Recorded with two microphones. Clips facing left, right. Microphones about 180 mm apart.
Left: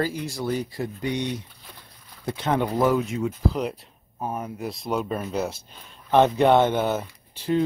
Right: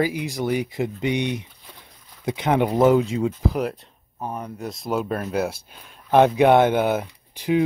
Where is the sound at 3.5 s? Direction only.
Centre (ahead or behind).